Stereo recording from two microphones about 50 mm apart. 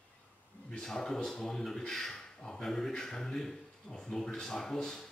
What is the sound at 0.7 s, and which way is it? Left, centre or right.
Speech, centre.